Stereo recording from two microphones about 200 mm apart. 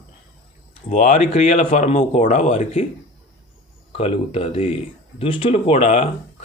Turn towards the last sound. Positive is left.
turn(degrees=30)  # may be behind; listen again after turning